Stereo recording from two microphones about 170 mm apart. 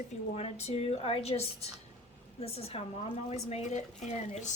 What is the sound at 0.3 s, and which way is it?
A woman's voice, 40° left (ahead or behind).